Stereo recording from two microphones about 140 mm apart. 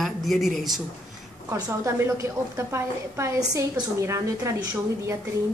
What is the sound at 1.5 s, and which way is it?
A woman's voice, 20° right (ahead or behind).